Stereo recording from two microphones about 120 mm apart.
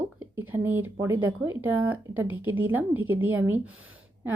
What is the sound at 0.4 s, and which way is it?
A woman's voice, 20° right (ahead or behind).